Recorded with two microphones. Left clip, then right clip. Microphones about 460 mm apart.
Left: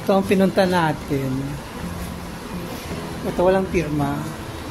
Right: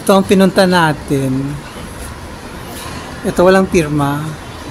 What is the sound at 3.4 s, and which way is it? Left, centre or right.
Speech, left.